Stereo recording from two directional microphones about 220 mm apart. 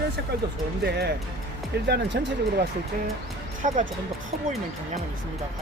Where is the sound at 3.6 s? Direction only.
35° right (ahead or behind).